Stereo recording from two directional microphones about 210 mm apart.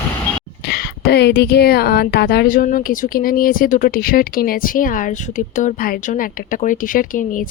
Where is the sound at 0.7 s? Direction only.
50° left (ahead or behind).